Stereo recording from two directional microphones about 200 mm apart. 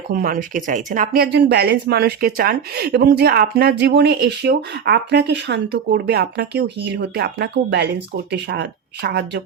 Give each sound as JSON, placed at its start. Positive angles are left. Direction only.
{"t": 0.1, "sound": "speech", "side_deg": -45}